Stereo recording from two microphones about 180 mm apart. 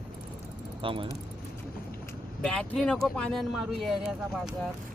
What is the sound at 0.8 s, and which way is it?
Speech, 30° right (ahead or behind).